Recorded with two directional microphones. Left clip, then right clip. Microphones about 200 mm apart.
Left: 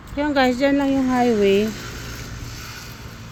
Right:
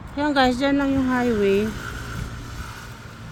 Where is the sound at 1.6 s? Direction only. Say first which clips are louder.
Left 1 dB; 5° right (ahead or behind).